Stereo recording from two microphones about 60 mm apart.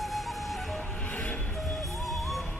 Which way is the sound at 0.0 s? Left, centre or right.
Centre.